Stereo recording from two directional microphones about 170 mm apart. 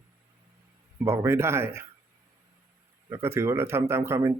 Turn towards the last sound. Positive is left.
turn(degrees=-15)  # may be behind; listen again after turning